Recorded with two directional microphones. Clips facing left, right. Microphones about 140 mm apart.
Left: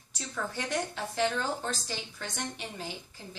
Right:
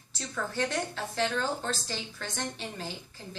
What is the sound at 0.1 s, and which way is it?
A woman's voice, 15° left (ahead or behind).